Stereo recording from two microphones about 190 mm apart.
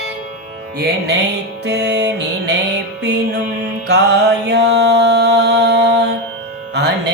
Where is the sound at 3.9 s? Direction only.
60° right (ahead or behind).